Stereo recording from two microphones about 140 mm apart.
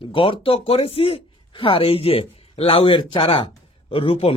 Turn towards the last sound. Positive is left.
turn(degrees=40)  # may be behind; listen again after turning